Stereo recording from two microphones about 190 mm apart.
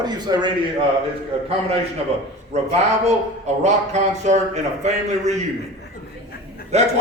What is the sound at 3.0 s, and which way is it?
Speech, 35° right (ahead or behind).